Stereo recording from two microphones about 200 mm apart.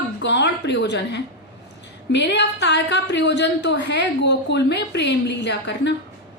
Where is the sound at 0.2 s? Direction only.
60° left (ahead or behind).